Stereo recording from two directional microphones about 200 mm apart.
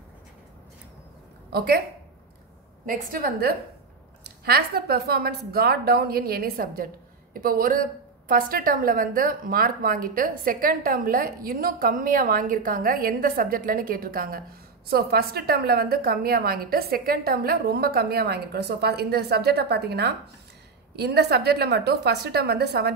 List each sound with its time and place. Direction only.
2.9 s a woman's voice: 45° right (ahead or behind)